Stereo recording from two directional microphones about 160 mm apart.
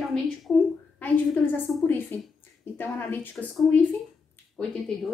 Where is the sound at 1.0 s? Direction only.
10° left (ahead or behind).